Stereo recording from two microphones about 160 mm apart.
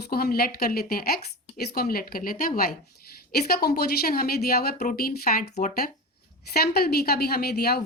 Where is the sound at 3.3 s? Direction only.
80° left.